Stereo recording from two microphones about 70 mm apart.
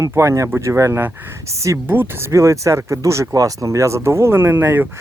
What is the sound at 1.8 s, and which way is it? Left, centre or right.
Speech, right.